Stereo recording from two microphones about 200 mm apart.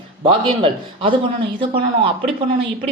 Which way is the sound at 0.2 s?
25° right (ahead or behind).